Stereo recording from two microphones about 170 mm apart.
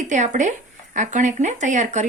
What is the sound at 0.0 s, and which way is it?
Speech, 45° right (ahead or behind).